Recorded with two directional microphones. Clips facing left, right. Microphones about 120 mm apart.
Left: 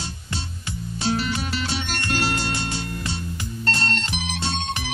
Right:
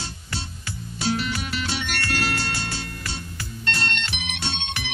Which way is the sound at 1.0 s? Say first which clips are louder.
Left 1 dB; 25° left (ahead or behind).